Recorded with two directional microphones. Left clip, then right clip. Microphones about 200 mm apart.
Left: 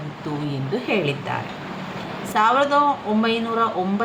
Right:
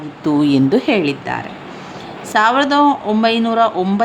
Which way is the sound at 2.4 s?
40° right (ahead or behind).